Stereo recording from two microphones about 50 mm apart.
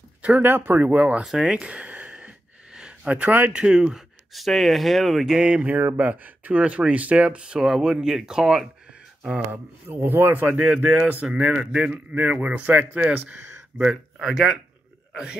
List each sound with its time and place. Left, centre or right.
0.4 s speech: right
1.4 s a sound: centre
2.9 s speech: right
3.5 s speech: centre
4.3 s speech: centre
5.4 s a man's voice: right
7.6 s speech: centre
9.5 s a man's voice: right
10.5 s speech: right
11.5 s a man's voice: centre
14.2 s speech: centre